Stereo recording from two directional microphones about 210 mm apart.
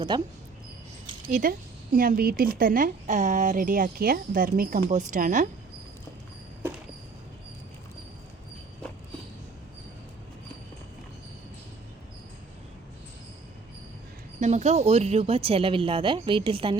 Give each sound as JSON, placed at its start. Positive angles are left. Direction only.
{"t": 0.1, "sound": "speech", "side_deg": -20}
{"t": 1.3, "sound": "a woman's voice", "side_deg": -40}
{"t": 14.3, "sound": "speech", "side_deg": -35}